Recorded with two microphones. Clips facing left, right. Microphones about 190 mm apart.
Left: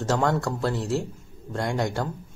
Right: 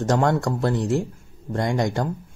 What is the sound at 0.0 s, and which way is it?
Speech, 15° right (ahead or behind).